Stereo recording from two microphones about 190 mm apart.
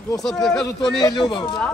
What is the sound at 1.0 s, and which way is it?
Speech, 20° left (ahead or behind).